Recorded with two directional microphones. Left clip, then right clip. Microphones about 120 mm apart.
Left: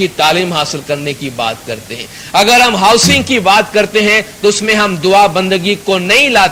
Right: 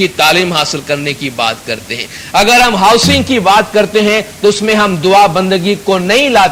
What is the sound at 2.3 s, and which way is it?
A man's voice, 30° right (ahead or behind).